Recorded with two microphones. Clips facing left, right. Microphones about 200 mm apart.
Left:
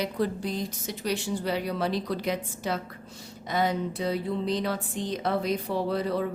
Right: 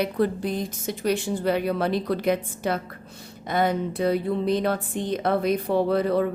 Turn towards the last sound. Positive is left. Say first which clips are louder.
# right 6 dB
turn(degrees=-55)  # may be behind; listen again after turning